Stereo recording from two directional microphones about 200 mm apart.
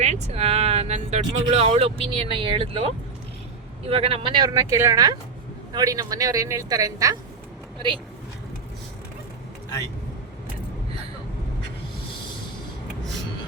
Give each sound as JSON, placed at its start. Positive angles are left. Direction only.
{"t": 0.0, "sound": "a man's voice", "side_deg": -35}